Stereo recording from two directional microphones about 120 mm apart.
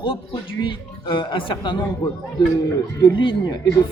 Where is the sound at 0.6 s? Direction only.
40° left (ahead or behind).